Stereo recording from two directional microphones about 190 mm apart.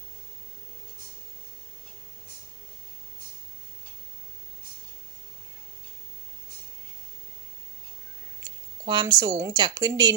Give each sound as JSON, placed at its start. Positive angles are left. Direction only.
{"t": 8.9, "sound": "speech", "side_deg": -20}